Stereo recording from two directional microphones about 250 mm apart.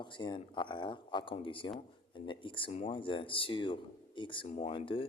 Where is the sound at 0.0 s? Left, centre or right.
Centre.